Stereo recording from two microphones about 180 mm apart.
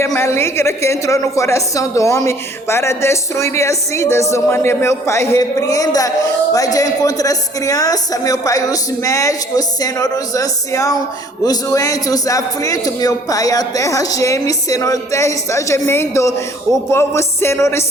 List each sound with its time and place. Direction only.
0.0 s a woman's voice: 15° left (ahead or behind)